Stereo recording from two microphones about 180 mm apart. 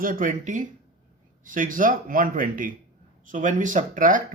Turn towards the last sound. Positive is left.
turn(degrees=-45)  # may be behind; listen again after turning